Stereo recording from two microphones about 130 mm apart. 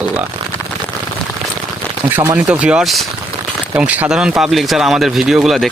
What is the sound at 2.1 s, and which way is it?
Speech, 25° right (ahead or behind).